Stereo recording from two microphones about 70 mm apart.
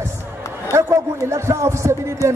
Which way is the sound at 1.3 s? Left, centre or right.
Right.